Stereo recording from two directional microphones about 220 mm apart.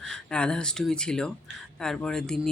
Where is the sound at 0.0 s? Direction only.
5° left (ahead or behind).